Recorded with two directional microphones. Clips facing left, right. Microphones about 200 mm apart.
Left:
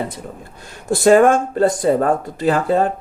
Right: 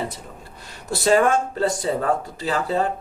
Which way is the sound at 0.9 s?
50° left (ahead or behind).